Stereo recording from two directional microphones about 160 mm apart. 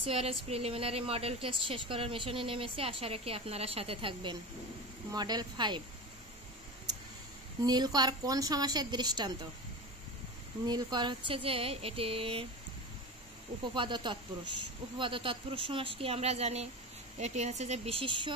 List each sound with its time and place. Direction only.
0.1 s a woman's voice: 40° right (ahead or behind)
7.6 s a woman's voice: 25° right (ahead or behind)
10.6 s a woman's voice: 25° right (ahead or behind)
13.7 s a woman's voice: 30° right (ahead or behind)